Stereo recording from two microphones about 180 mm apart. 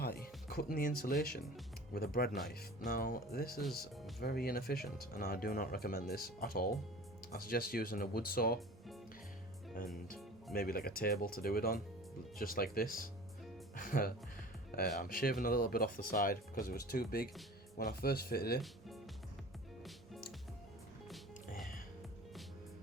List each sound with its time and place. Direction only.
0.0 s speech: 55° left (ahead or behind)
10.5 s speech: 55° left (ahead or behind)
21.1 s music: centre (ahead or behind)